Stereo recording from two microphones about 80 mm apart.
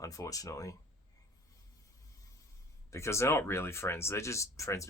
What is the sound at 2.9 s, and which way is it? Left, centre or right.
Speech, left.